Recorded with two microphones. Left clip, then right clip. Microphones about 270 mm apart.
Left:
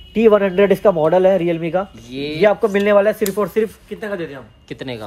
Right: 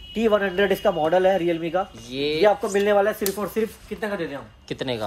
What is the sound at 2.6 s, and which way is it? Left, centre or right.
Speech, centre.